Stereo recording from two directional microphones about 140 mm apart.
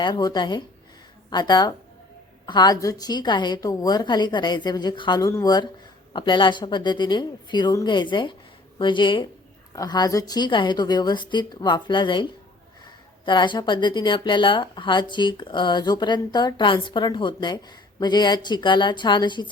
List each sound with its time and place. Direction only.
0.0 s a woman's voice: 30° left (ahead or behind)